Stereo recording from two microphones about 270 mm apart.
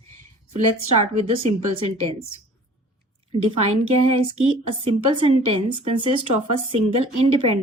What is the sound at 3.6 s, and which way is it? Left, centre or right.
A woman's voice, right.